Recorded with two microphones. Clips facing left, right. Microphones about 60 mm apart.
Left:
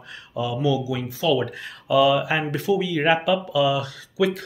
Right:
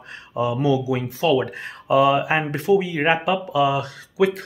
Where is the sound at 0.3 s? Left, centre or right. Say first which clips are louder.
Right 3 dB; right.